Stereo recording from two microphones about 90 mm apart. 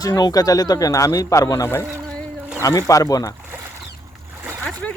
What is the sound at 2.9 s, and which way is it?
Speech, 40° left (ahead or behind).